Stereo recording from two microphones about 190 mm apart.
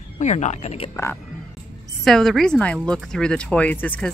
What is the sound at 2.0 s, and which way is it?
A woman's voice, centre (ahead or behind).